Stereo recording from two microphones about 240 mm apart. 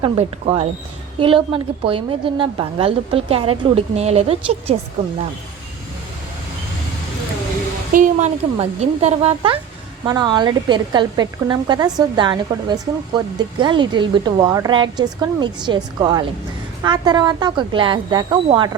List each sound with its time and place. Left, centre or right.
0.0 s a woman's voice: right
7.9 s a woman's voice: right